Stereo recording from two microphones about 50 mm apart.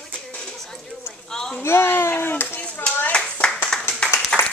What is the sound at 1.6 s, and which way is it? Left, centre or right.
Speech, left.